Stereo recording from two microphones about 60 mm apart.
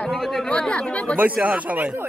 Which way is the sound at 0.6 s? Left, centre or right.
Centre.